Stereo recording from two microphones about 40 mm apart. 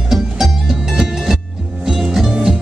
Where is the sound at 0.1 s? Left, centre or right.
Centre.